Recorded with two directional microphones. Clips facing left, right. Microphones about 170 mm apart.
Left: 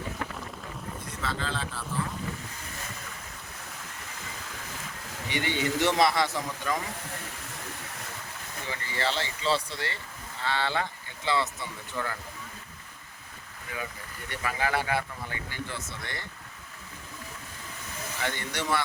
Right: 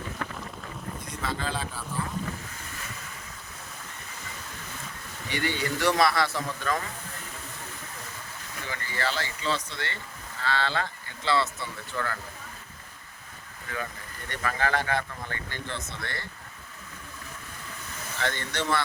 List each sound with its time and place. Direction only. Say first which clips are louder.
1.2 s speech: right 1 dB; 15° right (ahead or behind)
5.3 s speech: left 1 dB; 20° left (ahead or behind)
8.7 s speech: even; 25° left (ahead or behind)
10.4 s speech: right 1 dB; 15° left (ahead or behind)
14.3 s speech: right 2 dB; 10° left (ahead or behind)
18.2 s speech: right 2 dB; 10° left (ahead or behind)